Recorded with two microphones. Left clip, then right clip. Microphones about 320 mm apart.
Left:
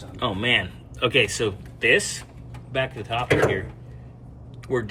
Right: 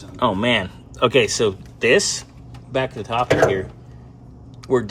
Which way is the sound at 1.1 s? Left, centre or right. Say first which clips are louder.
Right 2 dB; right.